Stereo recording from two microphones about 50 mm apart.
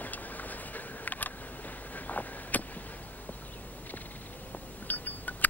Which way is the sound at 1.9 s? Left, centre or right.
Left.